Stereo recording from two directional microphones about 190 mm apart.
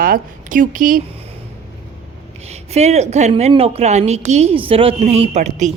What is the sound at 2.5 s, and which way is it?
Speech, 35° right (ahead or behind).